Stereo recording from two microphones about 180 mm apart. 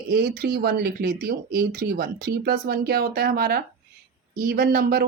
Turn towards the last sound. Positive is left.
turn(degrees=-55)  # may be behind; listen again after turning